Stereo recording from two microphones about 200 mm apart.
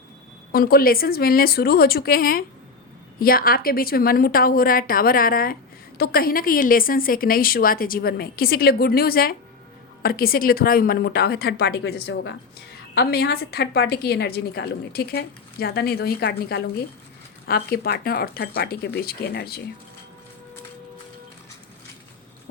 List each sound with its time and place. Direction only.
0.5 s a woman's voice: 45° left (ahead or behind)